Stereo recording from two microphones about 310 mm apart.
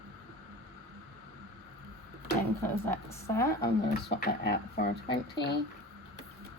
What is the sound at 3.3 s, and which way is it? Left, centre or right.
Speech, centre.